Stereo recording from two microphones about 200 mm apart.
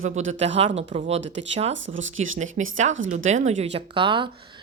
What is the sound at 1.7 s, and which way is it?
Speech, 70° right (ahead or behind).